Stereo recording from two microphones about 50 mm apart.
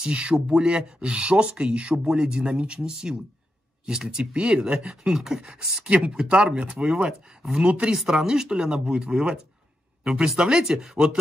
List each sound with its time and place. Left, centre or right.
0.0 s speech: right
5.9 s speech: right
7.9 s speech: centre